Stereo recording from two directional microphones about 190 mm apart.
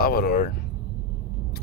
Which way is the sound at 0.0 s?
55° left (ahead or behind).